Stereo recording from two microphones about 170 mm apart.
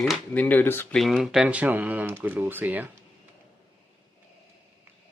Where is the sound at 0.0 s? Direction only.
5° left (ahead or behind).